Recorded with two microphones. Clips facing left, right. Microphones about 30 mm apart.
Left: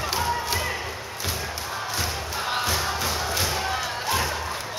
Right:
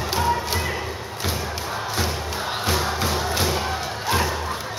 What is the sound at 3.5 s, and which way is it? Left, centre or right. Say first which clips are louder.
Crowd: right 1 dB; centre.